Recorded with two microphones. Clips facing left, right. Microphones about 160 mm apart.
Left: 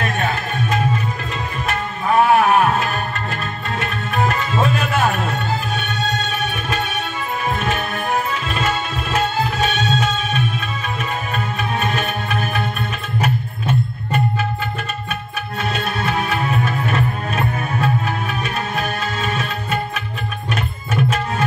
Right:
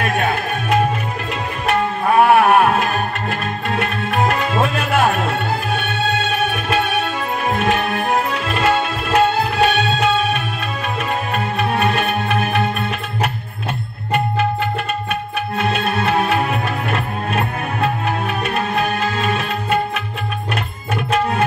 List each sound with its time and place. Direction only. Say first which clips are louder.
2.1 s a sound: right 2 dB; 65° right (ahead or behind)
3.7 s music: right 2 dB; 65° right (ahead or behind)
6.7 s music: right 7 dB; 65° right (ahead or behind)
7.5 s tabla: right 4 dB; 65° right (ahead or behind)
11.3 s music: right 4 dB; 60° right (ahead or behind)
15.6 s music: right 3 dB; 60° right (ahead or behind)